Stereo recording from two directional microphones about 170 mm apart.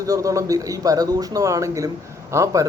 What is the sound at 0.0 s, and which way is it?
A man's voice, 20° right (ahead or behind).